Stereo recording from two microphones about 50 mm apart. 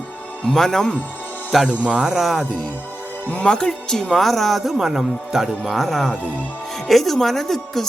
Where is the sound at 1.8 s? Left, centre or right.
Centre.